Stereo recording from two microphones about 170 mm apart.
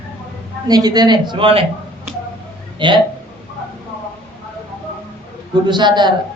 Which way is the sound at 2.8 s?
25° right (ahead or behind).